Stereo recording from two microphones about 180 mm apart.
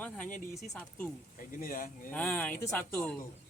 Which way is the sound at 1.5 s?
50° left (ahead or behind).